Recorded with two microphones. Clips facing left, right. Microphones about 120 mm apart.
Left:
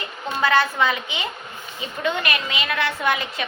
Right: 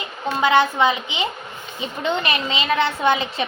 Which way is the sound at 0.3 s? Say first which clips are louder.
Right 3 dB; 20° right (ahead or behind).